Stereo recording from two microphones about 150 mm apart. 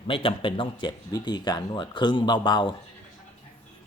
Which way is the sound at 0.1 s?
35° left (ahead or behind).